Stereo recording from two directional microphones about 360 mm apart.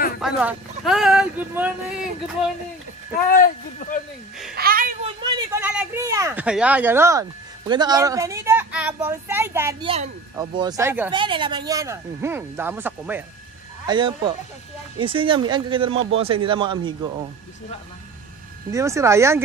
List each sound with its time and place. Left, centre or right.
0.2 s speech: centre
3.3 s speech: left
4.6 s speech: right
18.7 s speech: centre